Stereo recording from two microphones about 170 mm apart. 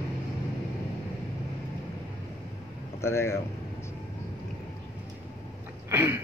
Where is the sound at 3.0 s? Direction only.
15° left (ahead or behind).